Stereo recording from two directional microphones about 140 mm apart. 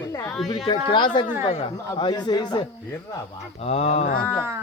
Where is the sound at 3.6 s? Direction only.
45° left (ahead or behind).